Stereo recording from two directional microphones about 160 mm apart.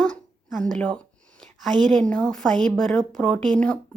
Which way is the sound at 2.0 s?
5° left (ahead or behind).